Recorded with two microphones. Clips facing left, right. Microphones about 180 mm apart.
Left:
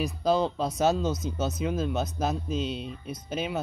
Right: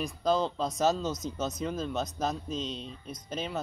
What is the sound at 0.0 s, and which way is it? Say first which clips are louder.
Speech: left 3 dB; 5° left (ahead or behind).